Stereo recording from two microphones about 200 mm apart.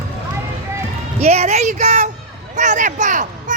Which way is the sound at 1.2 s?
30° right (ahead or behind).